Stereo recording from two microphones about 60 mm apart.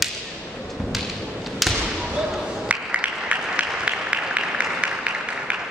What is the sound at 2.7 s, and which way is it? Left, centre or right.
Applause, right.